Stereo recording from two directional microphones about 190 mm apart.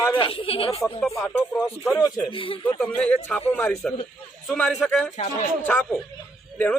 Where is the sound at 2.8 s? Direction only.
5° left (ahead or behind).